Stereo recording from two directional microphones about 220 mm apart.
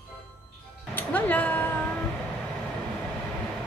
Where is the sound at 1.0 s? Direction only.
10° left (ahead or behind).